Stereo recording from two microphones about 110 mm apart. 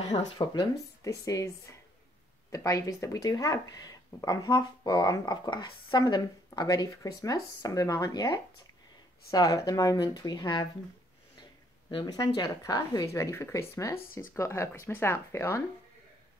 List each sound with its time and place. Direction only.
0.4 s speech: 40° left (ahead or behind)
12.1 s speech: 35° left (ahead or behind)